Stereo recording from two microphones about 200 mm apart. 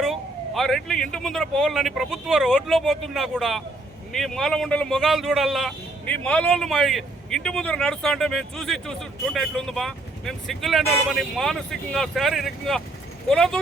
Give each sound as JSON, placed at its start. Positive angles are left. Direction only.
{"t": 0.0, "sound": "a man's voice", "side_deg": 0}